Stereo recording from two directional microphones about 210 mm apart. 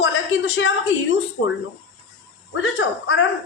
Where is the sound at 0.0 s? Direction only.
70° left (ahead or behind).